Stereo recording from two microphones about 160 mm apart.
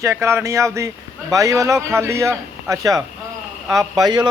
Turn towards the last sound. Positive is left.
turn(degrees=-25)  # may be behind; listen again after turning